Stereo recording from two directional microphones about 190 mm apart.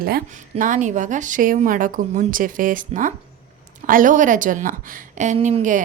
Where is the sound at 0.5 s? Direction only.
40° right (ahead or behind).